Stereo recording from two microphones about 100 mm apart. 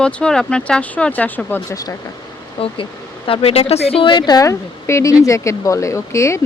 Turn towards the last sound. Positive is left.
turn(degrees=30)  # may be behind; listen again after turning